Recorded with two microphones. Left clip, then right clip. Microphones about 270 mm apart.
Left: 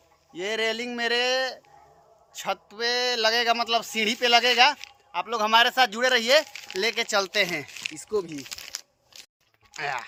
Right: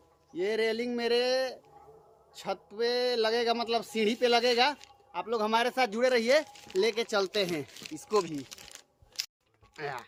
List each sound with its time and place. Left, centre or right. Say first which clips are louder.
0.3 s speech: left 2 dB; centre
8.4 s a sound: left 11 dB; left
9.7 s speech: left 8 dB; centre